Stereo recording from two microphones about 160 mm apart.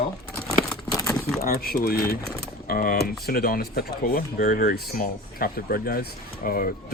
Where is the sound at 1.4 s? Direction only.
65° left (ahead or behind).